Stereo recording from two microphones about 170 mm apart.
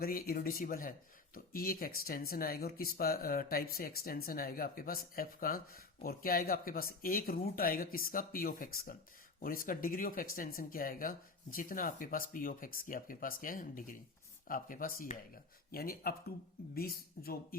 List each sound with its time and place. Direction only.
0.0 s speech: 60° left (ahead or behind)
15.7 s speech: 60° left (ahead or behind)